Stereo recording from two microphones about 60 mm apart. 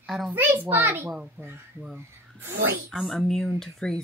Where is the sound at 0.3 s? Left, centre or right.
Right.